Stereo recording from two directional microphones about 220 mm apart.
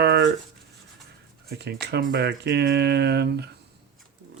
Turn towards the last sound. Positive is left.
turn(degrees=-50)  # may be behind; listen again after turning